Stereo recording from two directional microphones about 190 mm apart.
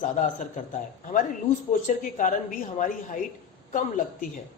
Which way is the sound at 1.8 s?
45° left (ahead or behind).